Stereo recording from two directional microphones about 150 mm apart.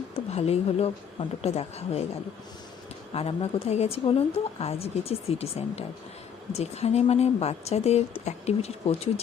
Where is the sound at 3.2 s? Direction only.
40° left (ahead or behind).